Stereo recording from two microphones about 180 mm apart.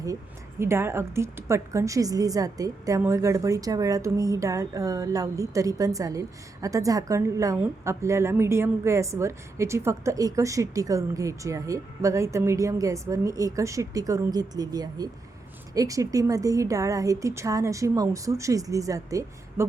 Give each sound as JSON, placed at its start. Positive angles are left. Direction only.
{"t": 0.6, "sound": "a woman's voice", "side_deg": -15}